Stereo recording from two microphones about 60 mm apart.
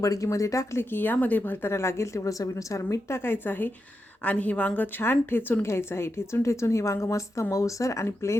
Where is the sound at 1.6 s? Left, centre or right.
Left.